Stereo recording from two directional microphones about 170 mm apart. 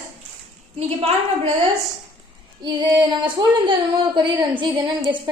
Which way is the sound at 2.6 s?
25° right (ahead or behind).